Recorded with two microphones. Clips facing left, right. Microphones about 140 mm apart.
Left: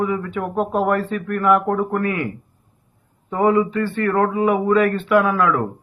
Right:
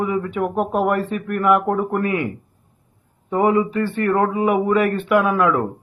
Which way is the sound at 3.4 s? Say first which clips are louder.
Left 1 dB; 20° right (ahead or behind).